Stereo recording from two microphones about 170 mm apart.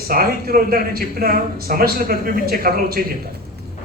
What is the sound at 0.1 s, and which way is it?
Speech, 60° right (ahead or behind).